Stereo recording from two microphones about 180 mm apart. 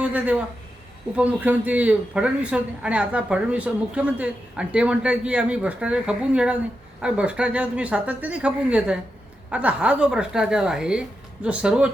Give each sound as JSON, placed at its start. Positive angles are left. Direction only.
{"t": 0.0, "sound": "a man's voice", "side_deg": -10}